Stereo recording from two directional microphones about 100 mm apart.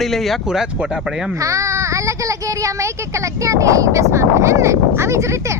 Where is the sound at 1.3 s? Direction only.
35° right (ahead or behind).